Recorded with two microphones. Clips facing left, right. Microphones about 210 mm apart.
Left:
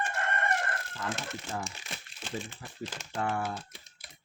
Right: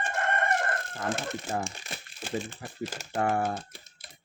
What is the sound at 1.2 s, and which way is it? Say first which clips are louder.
Speech: right 5 dB; 50° right (ahead or behind).